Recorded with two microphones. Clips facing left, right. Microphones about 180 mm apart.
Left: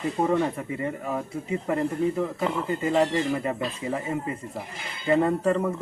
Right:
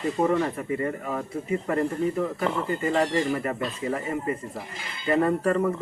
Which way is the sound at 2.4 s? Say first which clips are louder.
Even; centre (ahead or behind).